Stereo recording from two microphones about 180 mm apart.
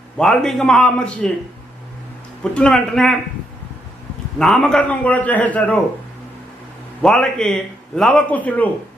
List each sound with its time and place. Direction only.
0.2 s speech: 5° left (ahead or behind)
2.4 s speech: 5° left (ahead or behind)
4.4 s a man's voice: 5° left (ahead or behind)
7.0 s speech: 5° left (ahead or behind)